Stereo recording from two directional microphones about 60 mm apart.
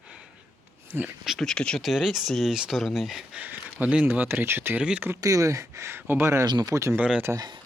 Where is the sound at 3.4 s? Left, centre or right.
Right.